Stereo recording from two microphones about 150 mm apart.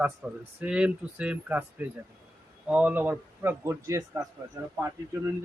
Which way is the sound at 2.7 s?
10° right (ahead or behind).